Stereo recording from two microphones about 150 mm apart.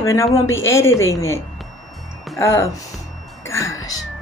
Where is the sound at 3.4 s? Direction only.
20° left (ahead or behind).